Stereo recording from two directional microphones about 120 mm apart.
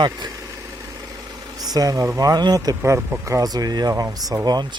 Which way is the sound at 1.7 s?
30° right (ahead or behind).